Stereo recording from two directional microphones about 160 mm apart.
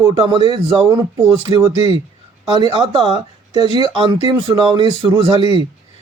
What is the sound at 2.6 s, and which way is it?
Speech, 35° right (ahead or behind).